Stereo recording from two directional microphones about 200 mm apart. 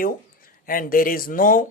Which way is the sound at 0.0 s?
45° left (ahead or behind).